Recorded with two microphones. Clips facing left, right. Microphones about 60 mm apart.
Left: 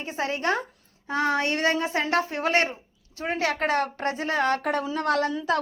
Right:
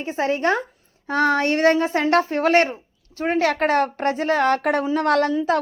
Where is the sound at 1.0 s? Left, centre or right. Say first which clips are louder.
Right 5 dB; right.